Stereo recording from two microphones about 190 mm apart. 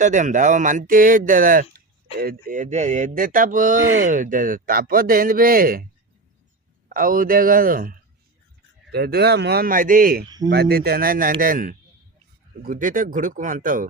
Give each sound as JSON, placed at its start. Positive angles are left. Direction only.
{"t": 0.0, "sound": "speech", "side_deg": -40}
{"t": 6.8, "sound": "speech", "side_deg": -45}
{"t": 10.2, "sound": "speech", "side_deg": -20}
{"t": 10.5, "sound": "speech", "side_deg": -55}